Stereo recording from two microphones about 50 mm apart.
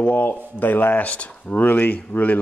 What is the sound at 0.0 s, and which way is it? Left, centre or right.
Speech, left.